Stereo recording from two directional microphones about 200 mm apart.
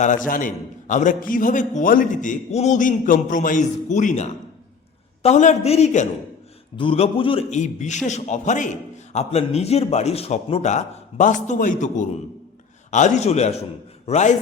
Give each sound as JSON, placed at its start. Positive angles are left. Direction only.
{"t": 0.0, "sound": "a man's voice", "side_deg": 40}